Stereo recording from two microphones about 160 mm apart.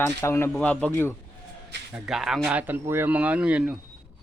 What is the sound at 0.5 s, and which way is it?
Speech, 5° left (ahead or behind).